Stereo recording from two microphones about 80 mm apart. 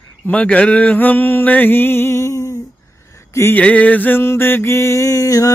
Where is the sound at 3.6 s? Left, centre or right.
Centre; by 5.5 s left.